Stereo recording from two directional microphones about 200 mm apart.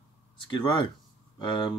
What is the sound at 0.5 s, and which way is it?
Speech, 25° left (ahead or behind).